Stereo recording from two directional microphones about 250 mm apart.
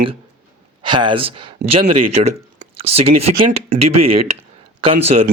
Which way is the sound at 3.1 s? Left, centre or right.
Right.